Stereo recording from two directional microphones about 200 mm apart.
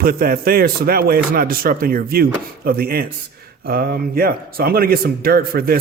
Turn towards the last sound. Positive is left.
turn(degrees=-50)  # may be behind; listen again after turning